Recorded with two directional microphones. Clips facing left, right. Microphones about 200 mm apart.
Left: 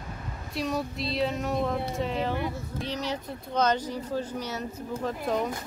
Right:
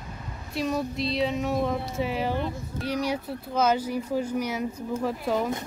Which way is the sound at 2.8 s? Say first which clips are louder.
Right 6 dB; 10° right (ahead or behind).